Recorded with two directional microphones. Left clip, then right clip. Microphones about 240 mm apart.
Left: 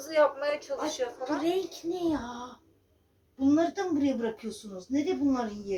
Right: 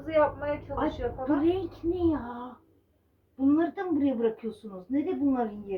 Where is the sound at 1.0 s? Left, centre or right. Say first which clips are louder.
Even; left.